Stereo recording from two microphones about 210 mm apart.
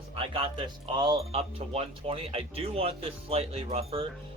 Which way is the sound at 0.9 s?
20° right (ahead or behind).